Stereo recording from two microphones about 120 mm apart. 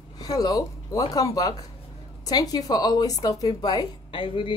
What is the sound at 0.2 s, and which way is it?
A woman's voice, 30° left (ahead or behind).